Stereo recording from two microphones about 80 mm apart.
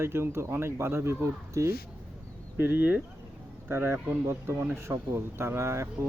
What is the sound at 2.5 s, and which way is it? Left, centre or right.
Speech, right.